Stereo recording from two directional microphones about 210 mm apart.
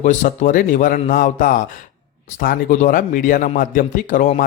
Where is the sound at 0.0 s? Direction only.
40° left (ahead or behind).